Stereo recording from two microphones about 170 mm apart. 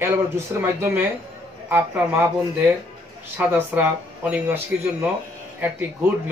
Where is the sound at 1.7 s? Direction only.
10° right (ahead or behind).